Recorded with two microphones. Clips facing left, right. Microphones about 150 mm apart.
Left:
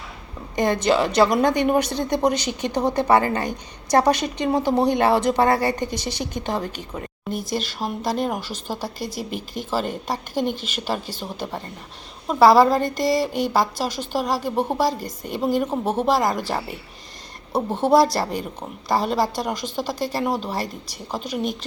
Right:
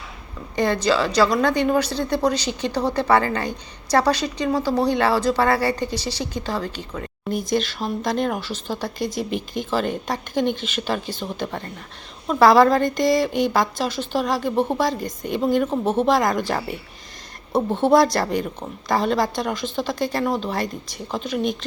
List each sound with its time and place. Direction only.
0.5 s a woman's voice: 15° left (ahead or behind)
7.3 s speech: 5° left (ahead or behind)